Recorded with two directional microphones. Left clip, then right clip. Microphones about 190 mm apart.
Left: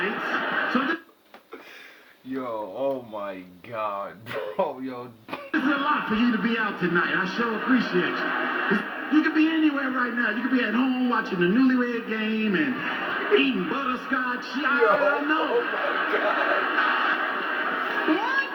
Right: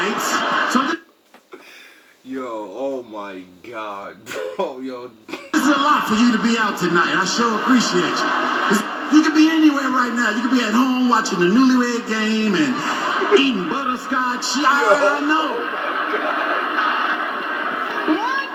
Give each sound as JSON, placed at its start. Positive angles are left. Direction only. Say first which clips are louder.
{"t": 0.0, "sound": "television", "louder": "right 7 dB", "side_deg": -65}
{"t": 5.5, "sound": "a man's voice", "louder": "right 8 dB", "side_deg": -65}
{"t": 15.2, "sound": "television", "louder": "right 4 dB", "side_deg": -65}